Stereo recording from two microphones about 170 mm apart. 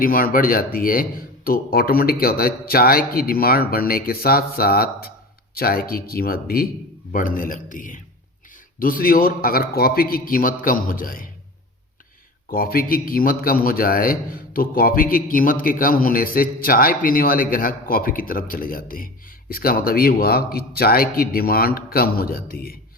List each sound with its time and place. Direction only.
0.0 s a man's voice: 55° left (ahead or behind)
12.5 s a man's voice: 60° left (ahead or behind)